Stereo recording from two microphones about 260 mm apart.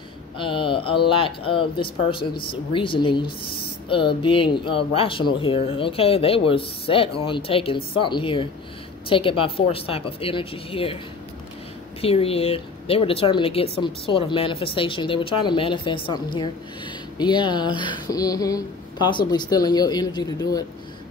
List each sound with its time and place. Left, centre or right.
0.4 s speech: centre
12.0 s speech: left
17.2 s speech: centre